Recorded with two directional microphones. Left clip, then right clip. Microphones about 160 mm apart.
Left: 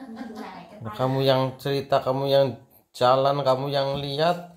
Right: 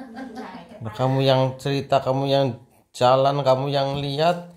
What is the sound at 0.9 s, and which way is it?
Speech, 20° right (ahead or behind).